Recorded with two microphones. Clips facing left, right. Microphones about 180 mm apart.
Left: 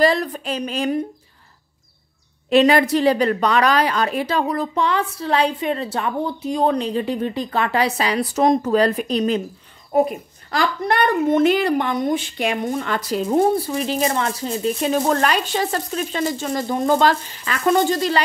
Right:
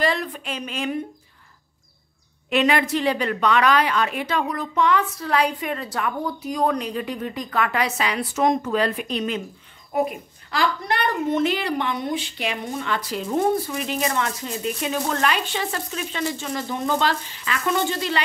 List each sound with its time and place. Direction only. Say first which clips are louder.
0.0 s a woman's voice: left 6 dB; 40° left (ahead or behind)
2.5 s a woman's voice: left 6 dB; 35° left (ahead or behind)